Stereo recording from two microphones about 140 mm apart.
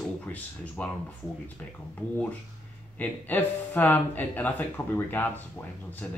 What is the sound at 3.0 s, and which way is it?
Speech, 10° left (ahead or behind).